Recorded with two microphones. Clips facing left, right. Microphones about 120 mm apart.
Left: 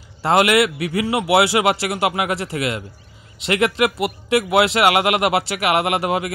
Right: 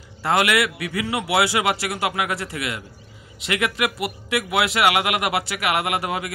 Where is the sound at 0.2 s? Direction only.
30° left (ahead or behind).